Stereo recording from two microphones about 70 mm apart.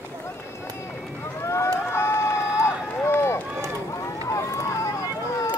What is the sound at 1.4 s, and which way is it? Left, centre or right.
Run, left.